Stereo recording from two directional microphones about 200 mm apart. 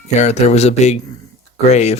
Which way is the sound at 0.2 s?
35° left (ahead or behind).